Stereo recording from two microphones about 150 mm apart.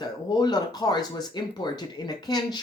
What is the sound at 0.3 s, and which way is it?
Speech, 25° left (ahead or behind).